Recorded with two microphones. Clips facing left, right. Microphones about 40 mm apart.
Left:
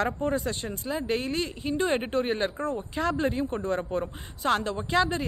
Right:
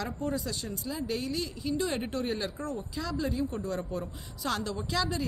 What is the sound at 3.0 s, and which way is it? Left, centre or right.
A woman's voice, left.